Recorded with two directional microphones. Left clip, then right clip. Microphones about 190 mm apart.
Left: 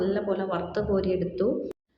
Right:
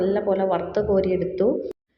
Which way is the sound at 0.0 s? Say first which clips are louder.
Right 6 dB; 15° right (ahead or behind).